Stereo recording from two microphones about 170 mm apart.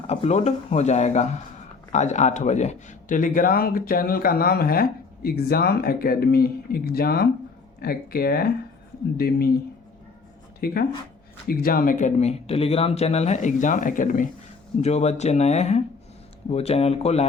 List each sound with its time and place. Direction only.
0.1 s speech: 35° left (ahead or behind); by 9.5 s 65° left (ahead or behind)
10.6 s speech: 65° left (ahead or behind)
14.8 s speech: 40° left (ahead or behind)